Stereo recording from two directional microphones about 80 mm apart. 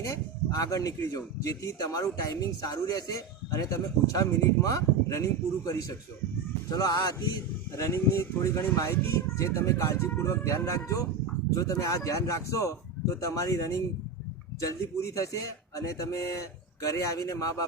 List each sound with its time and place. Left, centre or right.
0.0 s speech: left
7.8 s speech: left
14.9 s speech: left